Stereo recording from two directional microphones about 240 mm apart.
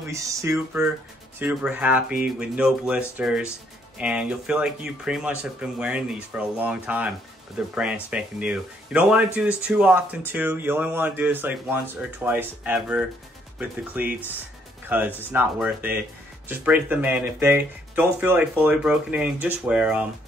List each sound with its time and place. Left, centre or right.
0.1 s speech: centre